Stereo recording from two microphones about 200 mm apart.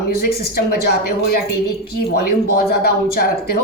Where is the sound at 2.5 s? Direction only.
50° left (ahead or behind).